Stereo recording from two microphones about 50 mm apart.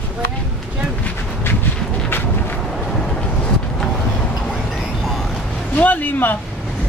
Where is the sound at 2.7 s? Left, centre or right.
Centre.